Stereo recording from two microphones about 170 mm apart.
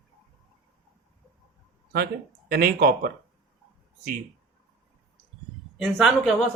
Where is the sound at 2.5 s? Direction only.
60° right (ahead or behind).